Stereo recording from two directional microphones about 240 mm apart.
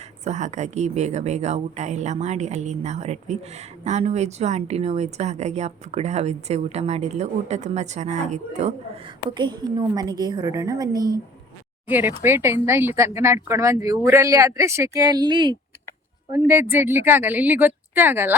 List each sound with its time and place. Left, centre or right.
0.3 s speech: right; by 18.3 s centre